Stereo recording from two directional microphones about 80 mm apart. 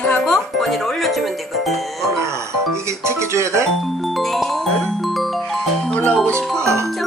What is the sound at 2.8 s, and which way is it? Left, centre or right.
Speech, right.